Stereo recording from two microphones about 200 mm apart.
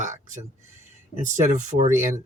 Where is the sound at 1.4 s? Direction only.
35° right (ahead or behind).